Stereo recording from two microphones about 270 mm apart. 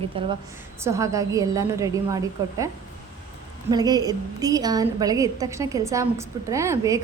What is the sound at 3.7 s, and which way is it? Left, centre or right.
A woman's voice, centre.